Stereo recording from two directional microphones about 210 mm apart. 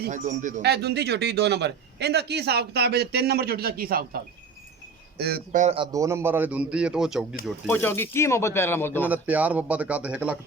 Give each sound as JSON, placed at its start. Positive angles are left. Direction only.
{"t": 0.1, "sound": "a man's voice", "side_deg": -35}
{"t": 0.6, "sound": "a man's voice", "side_deg": -50}
{"t": 5.7, "sound": "a man's voice", "side_deg": -20}
{"t": 7.7, "sound": "speech", "side_deg": 10}
{"t": 9.0, "sound": "a man's voice", "side_deg": -5}